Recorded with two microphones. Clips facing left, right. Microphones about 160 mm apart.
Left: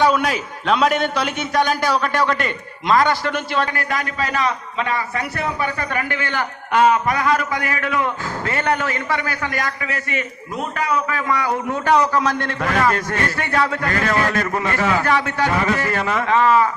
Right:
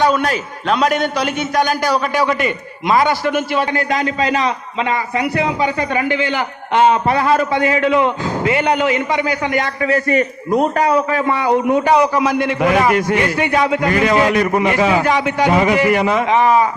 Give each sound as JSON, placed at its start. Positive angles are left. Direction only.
{"t": 0.0, "sound": "a man's voice", "side_deg": 5}
{"t": 3.7, "sound": "a man's voice", "side_deg": -20}
{"t": 6.8, "sound": "a man's voice", "side_deg": -30}